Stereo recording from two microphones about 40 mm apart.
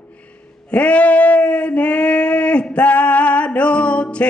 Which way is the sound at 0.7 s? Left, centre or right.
Left.